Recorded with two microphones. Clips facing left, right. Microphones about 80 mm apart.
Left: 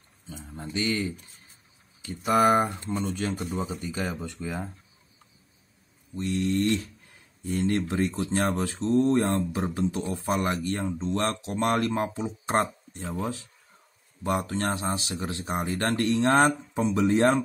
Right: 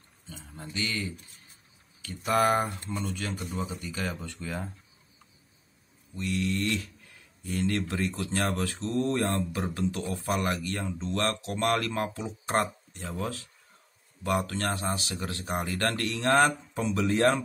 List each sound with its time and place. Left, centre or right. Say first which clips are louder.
0.3 s mantra: left 5 dB; centre
2.0 s speech: left 3 dB; centre
6.1 s speech: left 4 dB; left